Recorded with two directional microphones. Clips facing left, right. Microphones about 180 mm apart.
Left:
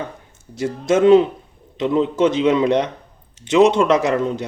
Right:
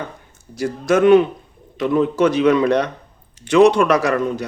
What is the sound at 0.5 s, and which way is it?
Speech, 25° left (ahead or behind).